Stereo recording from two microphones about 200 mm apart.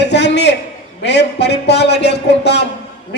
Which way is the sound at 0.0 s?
60° left (ahead or behind).